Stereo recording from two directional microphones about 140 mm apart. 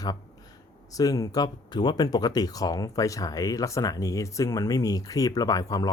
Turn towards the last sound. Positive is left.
turn(degrees=25)  # may be behind; listen again after turning